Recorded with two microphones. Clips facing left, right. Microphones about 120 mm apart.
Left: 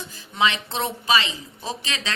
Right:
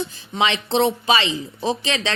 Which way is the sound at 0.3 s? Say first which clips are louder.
Right 4 dB; 25° right (ahead or behind).